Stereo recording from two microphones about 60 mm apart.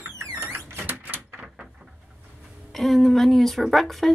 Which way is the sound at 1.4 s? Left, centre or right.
Centre.